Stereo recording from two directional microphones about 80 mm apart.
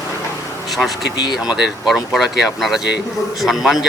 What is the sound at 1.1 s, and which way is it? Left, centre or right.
Speech, left.